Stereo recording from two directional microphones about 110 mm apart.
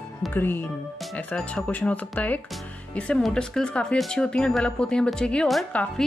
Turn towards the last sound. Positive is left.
turn(degrees=5)  # may be behind; listen again after turning